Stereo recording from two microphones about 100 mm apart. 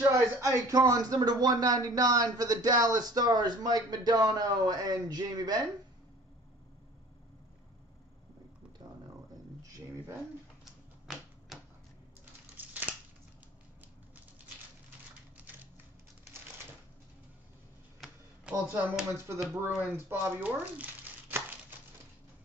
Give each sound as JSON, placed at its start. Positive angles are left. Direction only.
{"t": 0.1, "sound": "speech", "side_deg": -35}
{"t": 8.8, "sound": "a sound", "side_deg": -45}
{"t": 10.6, "sound": "typewriter", "side_deg": 0}
{"t": 18.0, "sound": "a sound", "side_deg": -10}
{"t": 19.1, "sound": "speech", "side_deg": -25}
{"t": 20.1, "sound": "crumpling", "side_deg": -15}